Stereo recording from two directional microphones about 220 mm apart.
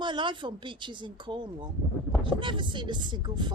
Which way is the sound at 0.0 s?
20° right (ahead or behind).